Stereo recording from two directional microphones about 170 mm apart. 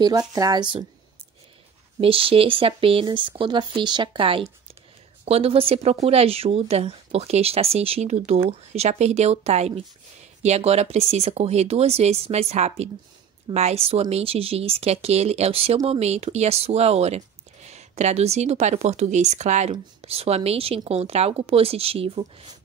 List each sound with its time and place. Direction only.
0.0 s speech: 25° right (ahead or behind)
2.0 s speech: 35° right (ahead or behind)